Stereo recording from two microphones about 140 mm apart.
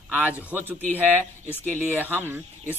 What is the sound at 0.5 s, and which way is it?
Speech, 15° right (ahead or behind).